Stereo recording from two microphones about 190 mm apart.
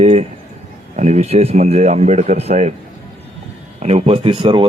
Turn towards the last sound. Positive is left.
turn(degrees=-25)  # may be behind; listen again after turning